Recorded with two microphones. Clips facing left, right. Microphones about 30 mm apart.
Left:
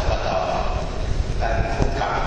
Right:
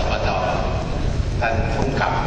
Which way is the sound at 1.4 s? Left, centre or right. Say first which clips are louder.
Right 2 dB; right.